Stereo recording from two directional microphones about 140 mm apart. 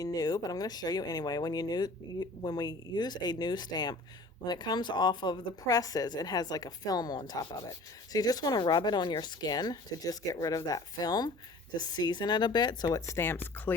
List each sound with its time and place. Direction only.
0.0 s speech: 25° left (ahead or behind)